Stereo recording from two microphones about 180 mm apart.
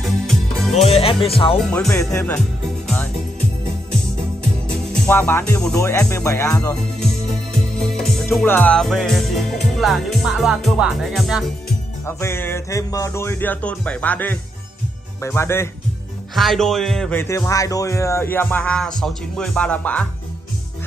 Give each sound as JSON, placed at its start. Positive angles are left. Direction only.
{"t": 0.0, "sound": "music", "side_deg": 0}
{"t": 0.7, "sound": "speech", "side_deg": 35}
{"t": 1.6, "sound": "music", "side_deg": 5}
{"t": 2.1, "sound": "speech", "side_deg": 10}
{"t": 4.6, "sound": "music", "side_deg": 10}
{"t": 5.8, "sound": "speech", "side_deg": 15}
{"t": 7.0, "sound": "music", "side_deg": 5}
{"t": 12.1, "sound": "speech", "side_deg": 15}
{"t": 16.3, "sound": "speech", "side_deg": 0}